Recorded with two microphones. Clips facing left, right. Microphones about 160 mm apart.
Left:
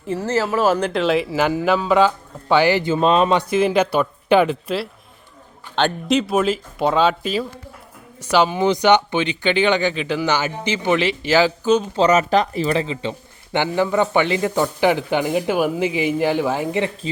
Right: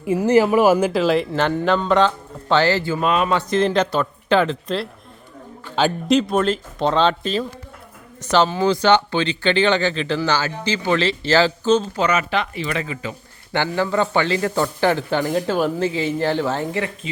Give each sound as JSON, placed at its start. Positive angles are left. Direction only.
{"t": 0.0, "sound": "speech", "side_deg": -10}
{"t": 3.3, "sound": "speech", "side_deg": 10}
{"t": 5.7, "sound": "speech", "side_deg": 0}
{"t": 11.9, "sound": "speech", "side_deg": 40}